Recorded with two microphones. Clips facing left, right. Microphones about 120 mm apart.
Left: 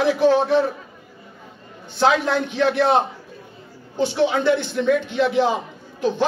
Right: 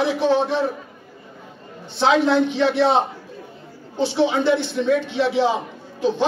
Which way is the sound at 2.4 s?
50° left (ahead or behind).